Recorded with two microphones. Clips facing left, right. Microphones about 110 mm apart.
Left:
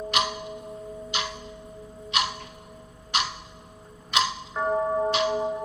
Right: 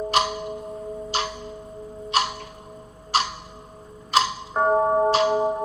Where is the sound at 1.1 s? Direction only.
35° right (ahead or behind).